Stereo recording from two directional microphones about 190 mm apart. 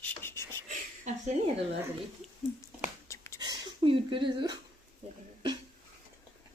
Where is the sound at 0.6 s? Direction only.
40° right (ahead or behind).